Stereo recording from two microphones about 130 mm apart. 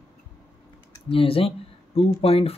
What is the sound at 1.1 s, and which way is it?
Speech, 45° left (ahead or behind).